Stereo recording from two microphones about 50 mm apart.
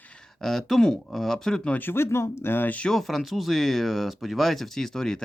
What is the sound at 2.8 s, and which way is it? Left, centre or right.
Speech, centre.